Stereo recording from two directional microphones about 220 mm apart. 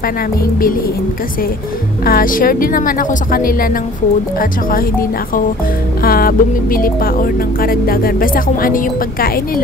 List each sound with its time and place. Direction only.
2.0 s speech: 40° left (ahead or behind)
6.0 s speech: 40° left (ahead or behind)